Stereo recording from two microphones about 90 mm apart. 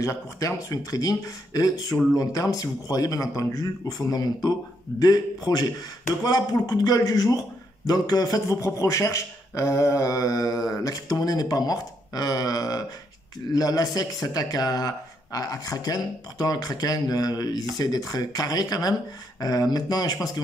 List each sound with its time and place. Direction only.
0.0 s a man's voice: 35° left (ahead or behind)